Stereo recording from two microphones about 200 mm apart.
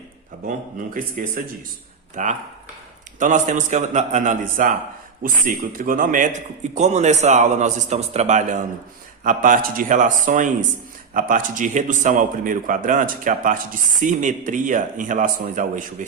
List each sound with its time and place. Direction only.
0.4 s a man's voice: 45° right (ahead or behind)